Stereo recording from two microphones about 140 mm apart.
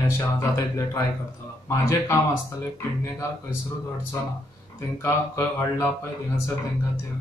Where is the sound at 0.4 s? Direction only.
20° left (ahead or behind).